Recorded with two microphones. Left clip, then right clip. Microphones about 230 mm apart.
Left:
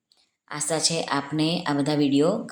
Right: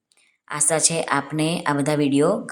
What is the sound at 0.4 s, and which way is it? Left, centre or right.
A woman's voice, centre.